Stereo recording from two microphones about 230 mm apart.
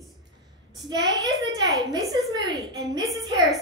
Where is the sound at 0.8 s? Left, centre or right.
Centre.